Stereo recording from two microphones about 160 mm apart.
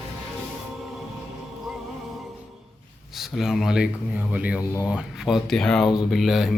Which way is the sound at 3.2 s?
Centre (ahead or behind).